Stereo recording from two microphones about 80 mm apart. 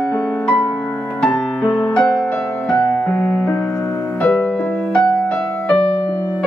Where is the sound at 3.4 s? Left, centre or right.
Left.